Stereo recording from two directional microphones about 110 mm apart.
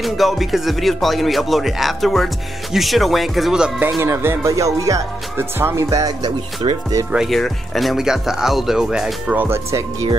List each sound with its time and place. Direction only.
0.0 s speech: centre (ahead or behind)
3.8 s speech: 20° right (ahead or behind)
7.1 s speech: centre (ahead or behind)
9.4 s speech: 25° right (ahead or behind)